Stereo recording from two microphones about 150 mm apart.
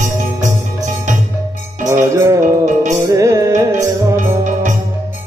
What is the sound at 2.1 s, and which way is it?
Music, 15° right (ahead or behind).